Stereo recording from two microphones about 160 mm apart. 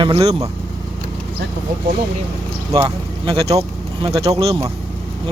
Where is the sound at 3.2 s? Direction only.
35° right (ahead or behind).